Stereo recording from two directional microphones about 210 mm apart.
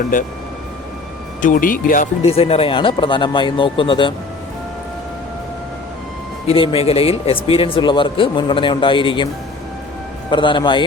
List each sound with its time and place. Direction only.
0.1 s speech: 40° left (ahead or behind)
1.4 s speech: 40° left (ahead or behind); by 4.1 s 25° left (ahead or behind)
6.5 s speech: 25° left (ahead or behind)